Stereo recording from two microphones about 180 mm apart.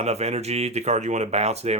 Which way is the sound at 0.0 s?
35° right (ahead or behind).